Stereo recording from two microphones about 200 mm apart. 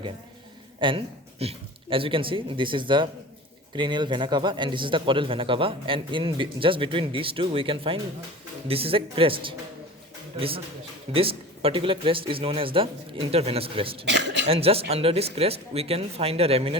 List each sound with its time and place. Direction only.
0.8 s speech: 25° right (ahead or behind)
11.1 s speech: 30° right (ahead or behind)
14.0 s speech: 60° right (ahead or behind)
14.4 s speech: 30° right (ahead or behind)